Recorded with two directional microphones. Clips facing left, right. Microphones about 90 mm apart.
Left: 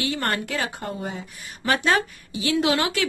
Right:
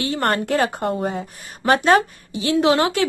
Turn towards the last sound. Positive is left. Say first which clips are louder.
# right 5 dB
turn(degrees=-35)  # may be behind; listen again after turning